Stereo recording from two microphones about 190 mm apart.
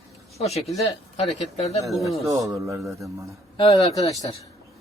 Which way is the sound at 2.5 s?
15° right (ahead or behind).